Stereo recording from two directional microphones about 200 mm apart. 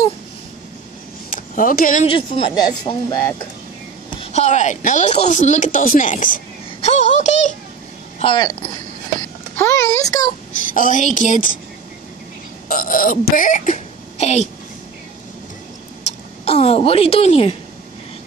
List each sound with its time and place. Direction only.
1.3 s speech: 40° left (ahead or behind)
2.0 s speech: 25° left (ahead or behind)
4.2 s speech: 35° left (ahead or behind)
8.2 s speech: 20° left (ahead or behind)
10.7 s speech: 40° left (ahead or behind)
12.6 s speech: 45° left (ahead or behind)
16.0 s speech: 30° left (ahead or behind)